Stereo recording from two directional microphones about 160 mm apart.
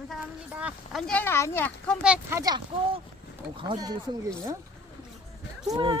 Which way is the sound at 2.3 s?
25° right (ahead or behind).